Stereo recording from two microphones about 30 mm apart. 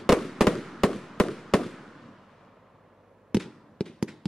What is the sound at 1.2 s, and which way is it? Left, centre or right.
Fireworks, centre.